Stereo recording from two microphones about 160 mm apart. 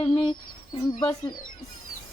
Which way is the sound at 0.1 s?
30° left (ahead or behind).